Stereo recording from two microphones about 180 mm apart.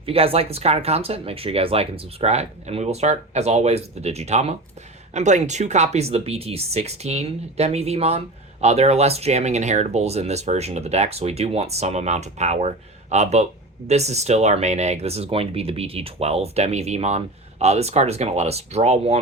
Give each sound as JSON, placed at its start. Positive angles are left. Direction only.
{"t": 0.0, "sound": "speech", "side_deg": -30}